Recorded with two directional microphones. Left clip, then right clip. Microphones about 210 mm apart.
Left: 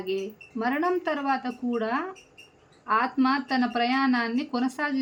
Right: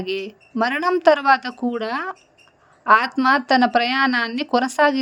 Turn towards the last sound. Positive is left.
turn(degrees=-50)  # may be behind; listen again after turning